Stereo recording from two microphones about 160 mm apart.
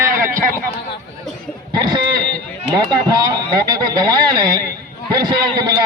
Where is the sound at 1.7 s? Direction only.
25° right (ahead or behind).